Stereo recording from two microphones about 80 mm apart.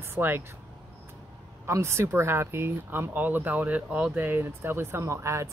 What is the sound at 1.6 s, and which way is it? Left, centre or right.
Speech, right.